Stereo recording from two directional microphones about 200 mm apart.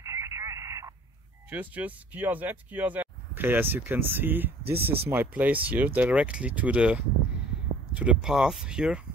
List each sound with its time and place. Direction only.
0.0 s radio: 15° right (ahead or behind)
1.5 s speech: 10° right (ahead or behind)